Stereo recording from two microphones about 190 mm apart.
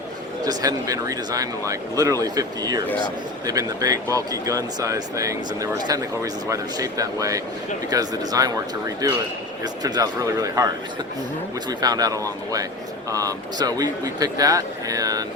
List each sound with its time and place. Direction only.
0.4 s speech: 20° right (ahead or behind)
11.7 s speech: 20° right (ahead or behind)